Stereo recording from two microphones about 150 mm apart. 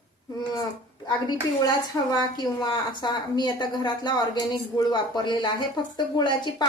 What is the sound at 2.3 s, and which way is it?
A woman's voice, 30° left (ahead or behind).